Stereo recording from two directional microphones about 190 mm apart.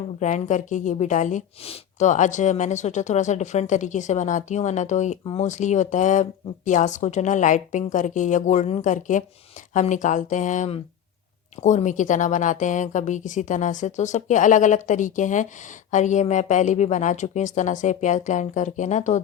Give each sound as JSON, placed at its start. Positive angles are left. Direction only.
{"t": 0.2, "sound": "speech", "side_deg": 40}